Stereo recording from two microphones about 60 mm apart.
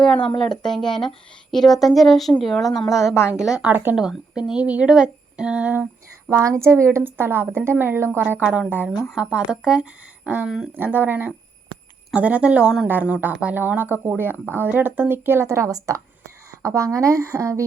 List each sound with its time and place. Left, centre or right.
0.0 s speech: centre
3.2 s a woman's voice: centre
3.7 s a woman's voice: right
4.4 s a woman's voice: centre
4.6 s speech: right
6.3 s speech: right
7.0 s a woman's voice: right
9.1 s a woman's voice: centre; by 15.4 s right
15.4 s speech: right